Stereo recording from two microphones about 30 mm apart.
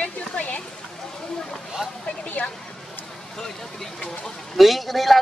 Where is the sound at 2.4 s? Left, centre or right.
Left.